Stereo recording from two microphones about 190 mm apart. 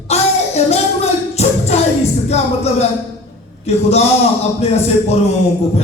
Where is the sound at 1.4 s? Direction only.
35° left (ahead or behind).